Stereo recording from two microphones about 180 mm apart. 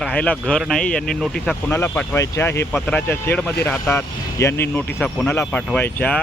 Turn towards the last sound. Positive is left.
turn(degrees=10)  # may be behind; listen again after turning